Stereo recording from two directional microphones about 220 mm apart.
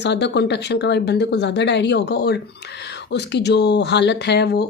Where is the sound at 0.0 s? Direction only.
50° left (ahead or behind).